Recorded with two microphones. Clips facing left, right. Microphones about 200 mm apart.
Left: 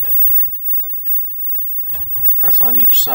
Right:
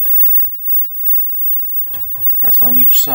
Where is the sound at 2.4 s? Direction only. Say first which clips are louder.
Right 4 dB; 15° right (ahead or behind).